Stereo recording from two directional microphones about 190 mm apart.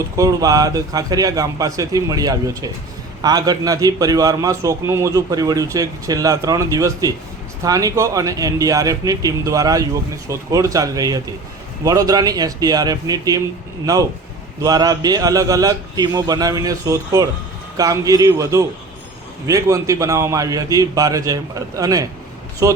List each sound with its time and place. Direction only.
0.2 s a man's voice: 20° right (ahead or behind)